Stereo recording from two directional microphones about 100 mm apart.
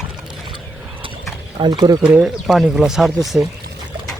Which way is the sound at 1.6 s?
45° right (ahead or behind).